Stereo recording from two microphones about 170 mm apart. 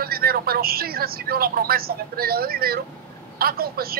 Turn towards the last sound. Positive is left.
turn(degrees=-65)  # may be behind; listen again after turning